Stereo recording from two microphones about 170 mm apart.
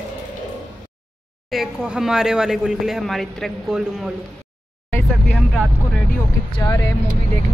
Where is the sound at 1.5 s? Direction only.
Centre (ahead or behind).